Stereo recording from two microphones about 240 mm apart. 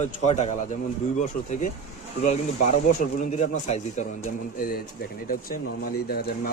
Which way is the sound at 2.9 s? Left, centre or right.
Left.